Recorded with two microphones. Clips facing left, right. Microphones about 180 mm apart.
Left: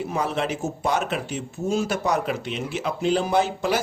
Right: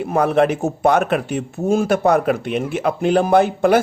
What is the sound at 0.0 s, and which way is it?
Speech, 55° right (ahead or behind).